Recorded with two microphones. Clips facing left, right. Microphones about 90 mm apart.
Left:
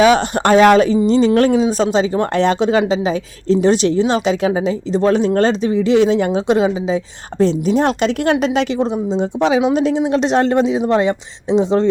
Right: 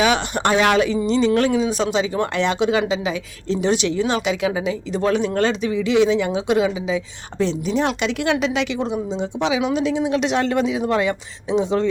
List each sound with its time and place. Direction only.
0.0 s speech: 40° left (ahead or behind)